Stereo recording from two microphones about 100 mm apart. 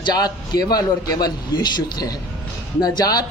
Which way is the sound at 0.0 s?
45° left (ahead or behind).